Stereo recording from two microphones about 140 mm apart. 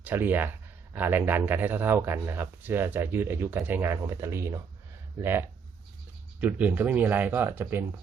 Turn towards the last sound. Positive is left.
turn(degrees=-15)  # may be behind; listen again after turning